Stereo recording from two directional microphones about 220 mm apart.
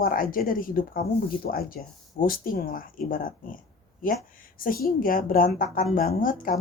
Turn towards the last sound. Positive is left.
turn(degrees=40)  # may be behind; listen again after turning